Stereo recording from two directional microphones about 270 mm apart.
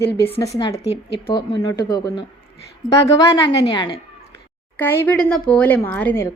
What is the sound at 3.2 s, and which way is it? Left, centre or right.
A woman's voice, centre.